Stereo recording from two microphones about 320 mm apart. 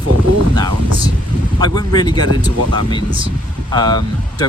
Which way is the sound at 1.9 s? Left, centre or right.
Centre.